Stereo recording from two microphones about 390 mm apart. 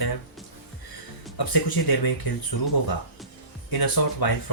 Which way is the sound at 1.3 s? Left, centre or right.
Left.